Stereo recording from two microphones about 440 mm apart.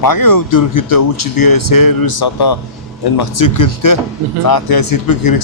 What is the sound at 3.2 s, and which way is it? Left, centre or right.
Speech, left.